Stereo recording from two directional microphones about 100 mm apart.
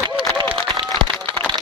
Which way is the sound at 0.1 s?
50° right (ahead or behind).